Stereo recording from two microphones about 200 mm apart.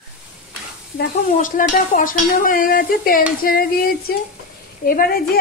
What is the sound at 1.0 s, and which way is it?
A woman's voice, 40° left (ahead or behind).